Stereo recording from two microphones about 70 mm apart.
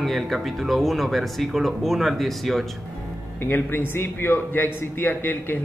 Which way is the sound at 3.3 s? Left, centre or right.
Left.